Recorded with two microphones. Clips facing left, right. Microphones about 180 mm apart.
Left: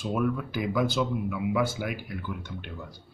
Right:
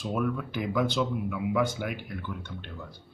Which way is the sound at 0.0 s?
Centre (ahead or behind).